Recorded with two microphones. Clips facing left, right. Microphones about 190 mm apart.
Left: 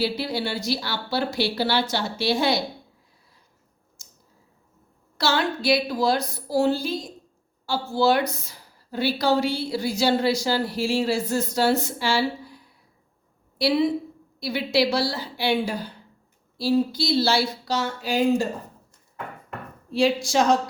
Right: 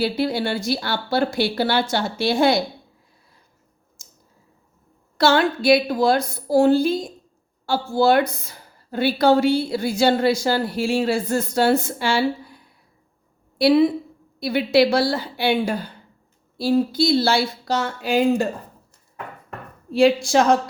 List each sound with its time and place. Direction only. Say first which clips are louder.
0.0 s a woman's voice: right 4 dB; 55° right (ahead or behind)
4.0 s a sound: right 2 dB; 50° right (ahead or behind)
5.1 s a woman's voice: right 6 dB; 55° right (ahead or behind)
13.6 s a woman's voice: right 5 dB; 55° right (ahead or behind)
19.9 s a woman's voice: right 5 dB; 55° right (ahead or behind)